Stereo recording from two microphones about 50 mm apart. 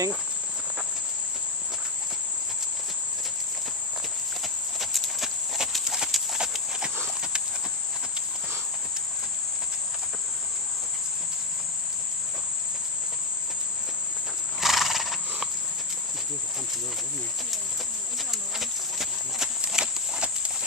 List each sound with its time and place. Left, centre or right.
4.4 s clip-clop: centre
5.9 s clip-clop: centre
14.6 s horse: centre
18.3 s clip-clop: centre
19.7 s a sound: centre